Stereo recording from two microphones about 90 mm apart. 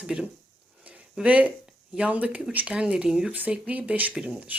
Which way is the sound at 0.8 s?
15° right (ahead or behind).